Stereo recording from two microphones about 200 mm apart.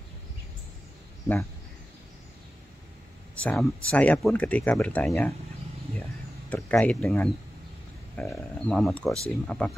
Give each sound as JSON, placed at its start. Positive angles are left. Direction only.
{"t": 3.3, "sound": "speech", "side_deg": 5}
{"t": 6.5, "sound": "speech", "side_deg": 5}